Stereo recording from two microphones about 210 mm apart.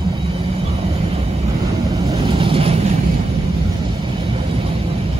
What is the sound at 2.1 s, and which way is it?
Vehicle, 25° right (ahead or behind).